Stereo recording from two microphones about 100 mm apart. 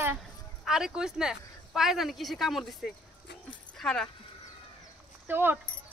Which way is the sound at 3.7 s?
5° left (ahead or behind).